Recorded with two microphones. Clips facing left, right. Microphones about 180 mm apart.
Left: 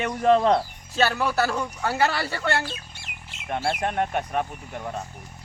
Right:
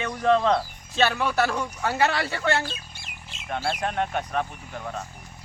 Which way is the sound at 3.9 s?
10° left (ahead or behind).